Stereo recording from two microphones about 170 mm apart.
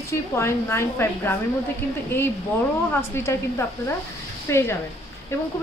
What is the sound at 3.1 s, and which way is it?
A woman's voice, 15° left (ahead or behind).